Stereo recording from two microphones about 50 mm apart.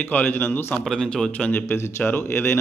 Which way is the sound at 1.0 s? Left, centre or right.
Centre.